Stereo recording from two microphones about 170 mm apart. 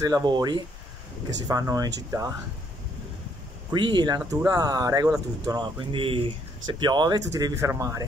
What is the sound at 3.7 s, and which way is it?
Speech, 25° right (ahead or behind).